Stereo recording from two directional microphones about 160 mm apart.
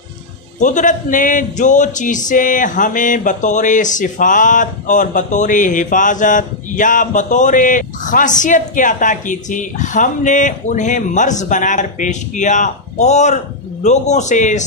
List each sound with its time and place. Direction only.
0.6 s speech: 50° left (ahead or behind)